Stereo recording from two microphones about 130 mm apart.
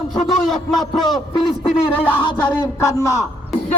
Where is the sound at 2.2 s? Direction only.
35° left (ahead or behind).